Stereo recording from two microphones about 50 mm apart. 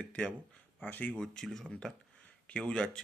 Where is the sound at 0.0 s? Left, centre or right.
Left.